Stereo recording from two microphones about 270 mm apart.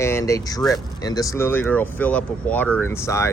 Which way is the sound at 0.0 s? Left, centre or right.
Centre.